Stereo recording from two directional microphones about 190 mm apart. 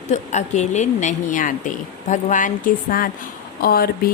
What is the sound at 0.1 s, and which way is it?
A woman's voice, 40° left (ahead or behind).